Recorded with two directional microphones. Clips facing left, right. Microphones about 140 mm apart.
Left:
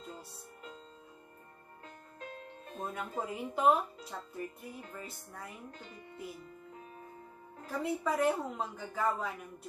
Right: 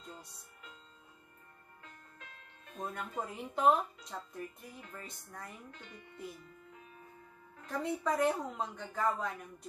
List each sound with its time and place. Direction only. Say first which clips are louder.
2.1 s music: left 11 dB; 35° left (ahead or behind)
2.8 s a woman's voice: left 1 dB; 5° left (ahead or behind)
5.7 s speech: left 3 dB; 35° left (ahead or behind)
7.6 s a woman's voice: left 1 dB; 5° left (ahead or behind)